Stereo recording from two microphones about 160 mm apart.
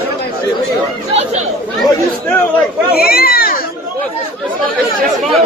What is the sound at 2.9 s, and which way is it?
Children playing, 70° left (ahead or behind).